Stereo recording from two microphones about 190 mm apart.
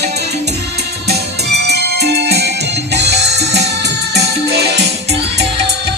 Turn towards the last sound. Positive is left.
turn(degrees=-60)  # may be behind; listen again after turning